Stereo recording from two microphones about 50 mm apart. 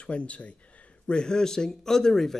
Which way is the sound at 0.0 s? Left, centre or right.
Left.